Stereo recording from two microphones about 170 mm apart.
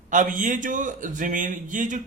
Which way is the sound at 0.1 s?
50° right (ahead or behind).